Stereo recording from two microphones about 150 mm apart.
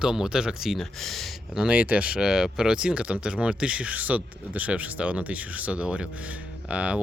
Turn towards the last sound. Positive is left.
turn(degrees=-10)  # may be behind; listen again after turning